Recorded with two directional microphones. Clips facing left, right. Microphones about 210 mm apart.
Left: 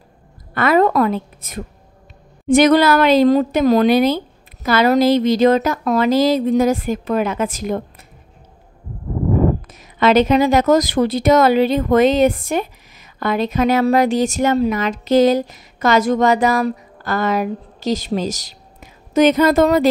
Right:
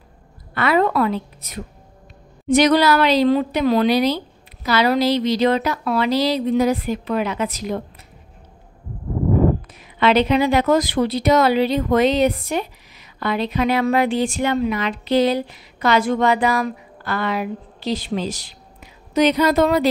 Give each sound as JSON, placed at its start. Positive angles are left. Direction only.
{"t": 0.6, "sound": "a woman's voice", "side_deg": 45}
{"t": 9.7, "sound": "a woman's voice", "side_deg": 45}